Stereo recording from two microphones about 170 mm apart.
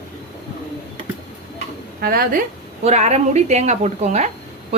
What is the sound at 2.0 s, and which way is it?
Speech, 60° right (ahead or behind).